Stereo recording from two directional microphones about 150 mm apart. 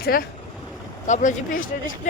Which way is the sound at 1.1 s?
60° left (ahead or behind).